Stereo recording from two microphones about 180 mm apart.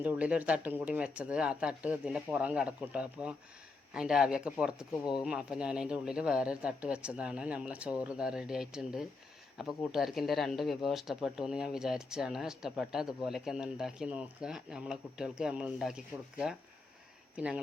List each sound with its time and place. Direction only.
0.0 s speech: 10° right (ahead or behind)
17.3 s speech: 5° right (ahead or behind)